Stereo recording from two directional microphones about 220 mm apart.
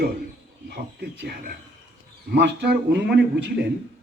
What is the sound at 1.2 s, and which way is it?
A man's voice, 45° right (ahead or behind).